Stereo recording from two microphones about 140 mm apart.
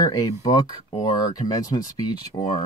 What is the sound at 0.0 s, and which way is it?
Speech, 25° left (ahead or behind).